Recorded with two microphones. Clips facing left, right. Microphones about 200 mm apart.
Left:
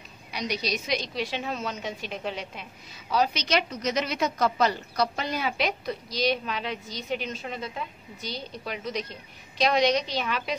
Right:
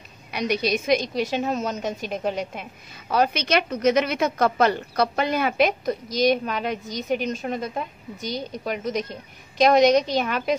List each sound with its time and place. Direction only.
0.3 s a woman's voice: 55° right (ahead or behind)